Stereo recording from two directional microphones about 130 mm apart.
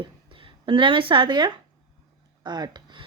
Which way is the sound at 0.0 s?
40° right (ahead or behind).